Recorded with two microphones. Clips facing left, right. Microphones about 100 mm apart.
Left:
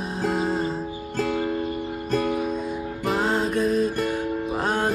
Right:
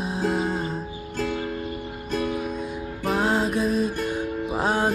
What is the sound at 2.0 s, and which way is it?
Music, 50° left (ahead or behind).